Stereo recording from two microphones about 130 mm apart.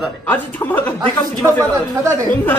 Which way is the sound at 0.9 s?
25° right (ahead or behind).